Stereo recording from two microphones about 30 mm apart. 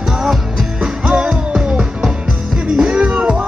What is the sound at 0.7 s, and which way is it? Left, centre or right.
Music, right.